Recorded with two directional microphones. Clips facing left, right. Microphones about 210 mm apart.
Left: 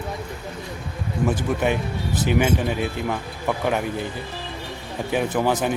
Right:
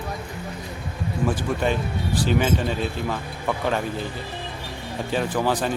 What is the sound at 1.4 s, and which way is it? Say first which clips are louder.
Speech: left 1 dB; 15° left (ahead or behind).